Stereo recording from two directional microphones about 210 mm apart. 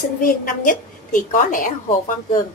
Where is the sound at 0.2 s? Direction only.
40° left (ahead or behind).